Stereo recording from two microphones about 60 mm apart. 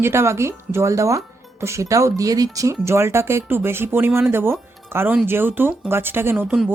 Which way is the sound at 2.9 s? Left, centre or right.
Right.